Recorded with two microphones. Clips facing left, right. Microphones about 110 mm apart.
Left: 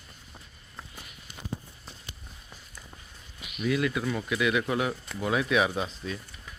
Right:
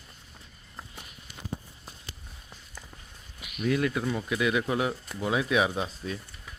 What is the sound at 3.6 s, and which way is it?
Speech, 35° right (ahead or behind).